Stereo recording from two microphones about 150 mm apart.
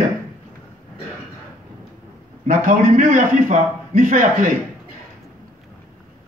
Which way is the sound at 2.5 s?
60° right (ahead or behind).